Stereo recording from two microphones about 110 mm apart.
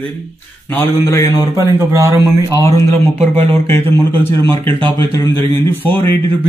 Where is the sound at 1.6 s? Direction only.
30° right (ahead or behind).